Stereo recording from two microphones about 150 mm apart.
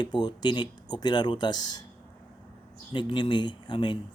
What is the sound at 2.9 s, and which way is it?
Speech, 30° left (ahead or behind).